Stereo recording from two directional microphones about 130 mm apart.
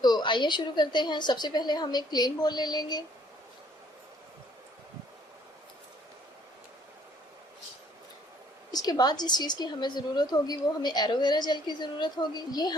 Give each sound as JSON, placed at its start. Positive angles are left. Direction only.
{"t": 0.0, "sound": "a woman's voice", "side_deg": 35}
{"t": 8.7, "sound": "a woman's voice", "side_deg": 30}